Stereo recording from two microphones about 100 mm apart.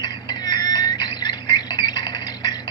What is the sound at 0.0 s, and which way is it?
Alarm clock, 45° left (ahead or behind).